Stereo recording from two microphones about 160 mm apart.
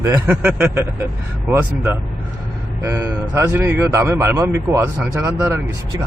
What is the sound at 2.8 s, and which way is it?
Speech, 20° right (ahead or behind).